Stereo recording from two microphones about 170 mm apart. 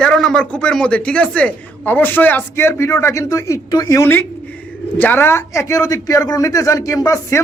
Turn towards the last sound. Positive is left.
turn(degrees=20)  # may be behind; listen again after turning